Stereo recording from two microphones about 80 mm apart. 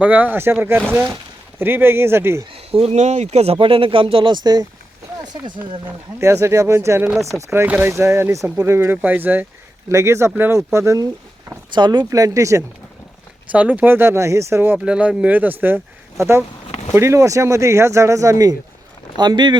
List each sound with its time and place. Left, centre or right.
0.0 s speech: right
3.6 s speech: right
6.1 s speech: right
9.0 s speech: right
9.9 s speech: right
11.7 s speech: right
12.1 s speech: right
13.5 s speech: centre
14.8 s speech: centre; by 18.5 s right
19.1 s speech: right